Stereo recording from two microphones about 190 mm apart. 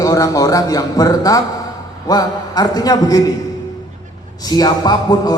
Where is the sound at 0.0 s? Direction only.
20° left (ahead or behind).